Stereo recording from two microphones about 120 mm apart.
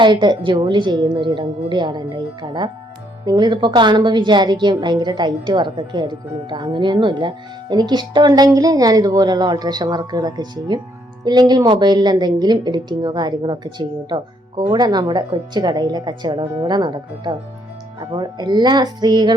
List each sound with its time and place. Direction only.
0.0 s a woman's voice: 40° right (ahead or behind)